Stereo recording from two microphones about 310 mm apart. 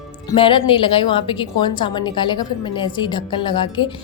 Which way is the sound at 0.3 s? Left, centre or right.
Centre.